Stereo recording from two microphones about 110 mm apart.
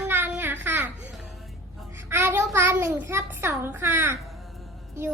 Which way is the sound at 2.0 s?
15° right (ahead or behind).